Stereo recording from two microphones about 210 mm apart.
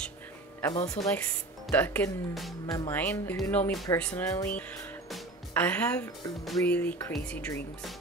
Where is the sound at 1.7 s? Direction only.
10° left (ahead or behind).